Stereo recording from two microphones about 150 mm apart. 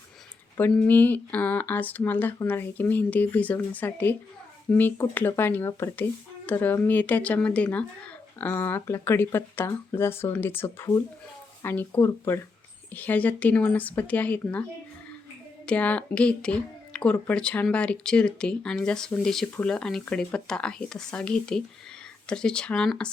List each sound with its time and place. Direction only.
0.7 s speech: 10° left (ahead or behind)
15.6 s speech: 10° left (ahead or behind)